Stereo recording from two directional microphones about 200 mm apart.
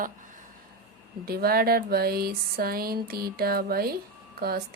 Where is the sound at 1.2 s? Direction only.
50° right (ahead or behind).